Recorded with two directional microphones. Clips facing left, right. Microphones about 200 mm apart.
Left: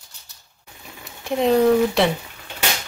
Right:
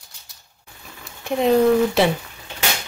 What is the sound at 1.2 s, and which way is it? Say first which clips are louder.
Speech: even; centre (ahead or behind).